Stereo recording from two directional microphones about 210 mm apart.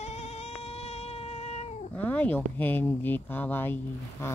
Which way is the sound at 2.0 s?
10° left (ahead or behind).